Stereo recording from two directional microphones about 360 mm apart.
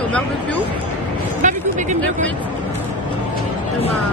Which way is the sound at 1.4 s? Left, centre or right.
Right.